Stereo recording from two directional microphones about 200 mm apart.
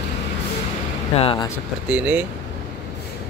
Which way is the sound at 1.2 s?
25° left (ahead or behind).